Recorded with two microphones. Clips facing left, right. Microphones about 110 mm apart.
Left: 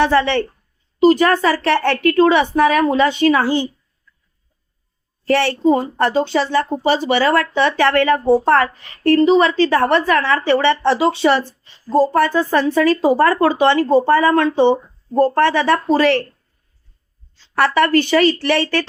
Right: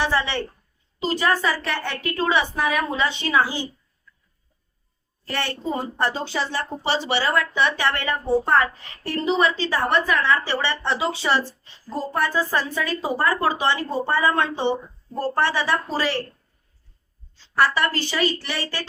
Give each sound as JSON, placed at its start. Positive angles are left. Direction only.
{"t": 0.0, "sound": "a woman's voice", "side_deg": 60}
{"t": 5.3, "sound": "a woman's voice", "side_deg": 90}
{"t": 6.3, "sound": "a woman's voice", "side_deg": 70}
{"t": 7.3, "sound": "a woman's voice", "side_deg": 80}
{"t": 11.9, "sound": "a woman's voice", "side_deg": 90}
{"t": 13.2, "sound": "a woman's voice", "side_deg": 65}
{"t": 14.6, "sound": "a woman's voice", "side_deg": 55}
{"t": 17.5, "sound": "a woman's voice", "side_deg": 65}